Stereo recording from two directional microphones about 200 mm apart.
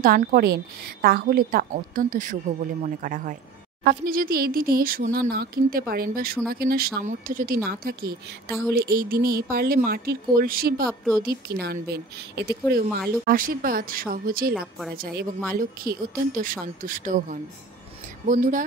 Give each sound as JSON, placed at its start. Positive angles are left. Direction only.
{"t": 0.0, "sound": "a man's voice", "side_deg": -50}